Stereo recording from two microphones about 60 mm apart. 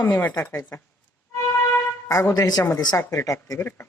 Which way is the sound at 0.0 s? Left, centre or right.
Left.